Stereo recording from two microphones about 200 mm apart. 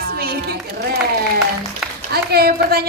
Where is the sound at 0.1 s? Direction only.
50° right (ahead or behind).